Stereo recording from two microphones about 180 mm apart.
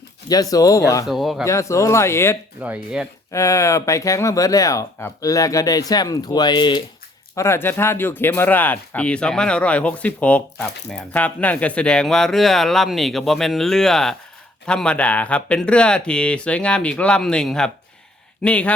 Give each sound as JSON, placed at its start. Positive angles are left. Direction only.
{"t": 0.3, "sound": "speech", "side_deg": 20}
{"t": 1.0, "sound": "speech", "side_deg": 0}
{"t": 1.5, "sound": "speech", "side_deg": 15}
{"t": 2.6, "sound": "speech", "side_deg": -10}
{"t": 3.3, "sound": "speech", "side_deg": 15}
{"t": 7.3, "sound": "speech", "side_deg": 15}